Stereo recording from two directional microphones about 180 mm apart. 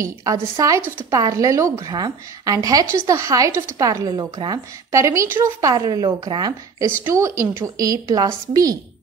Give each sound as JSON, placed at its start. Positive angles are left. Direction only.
{"t": 0.2, "sound": "a woman's voice", "side_deg": -20}